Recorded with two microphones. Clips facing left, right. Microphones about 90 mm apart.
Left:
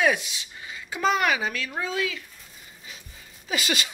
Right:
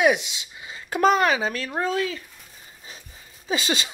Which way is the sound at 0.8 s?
55° right (ahead or behind).